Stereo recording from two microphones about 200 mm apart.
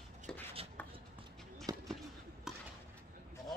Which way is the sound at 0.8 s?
10° left (ahead or behind).